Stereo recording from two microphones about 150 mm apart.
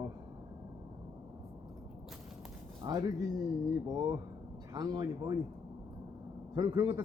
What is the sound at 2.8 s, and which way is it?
A man's voice, 25° right (ahead or behind).